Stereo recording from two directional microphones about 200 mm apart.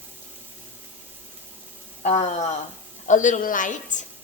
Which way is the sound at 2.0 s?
35° left (ahead or behind).